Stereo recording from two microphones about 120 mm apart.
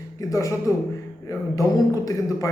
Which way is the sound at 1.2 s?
25° left (ahead or behind).